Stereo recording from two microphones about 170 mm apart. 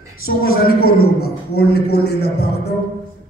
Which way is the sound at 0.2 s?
60° left (ahead or behind).